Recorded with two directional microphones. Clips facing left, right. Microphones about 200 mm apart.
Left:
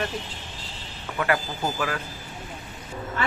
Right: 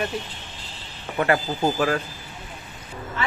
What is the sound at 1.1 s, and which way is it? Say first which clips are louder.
Speech: right 4 dB; 30° right (ahead or behind).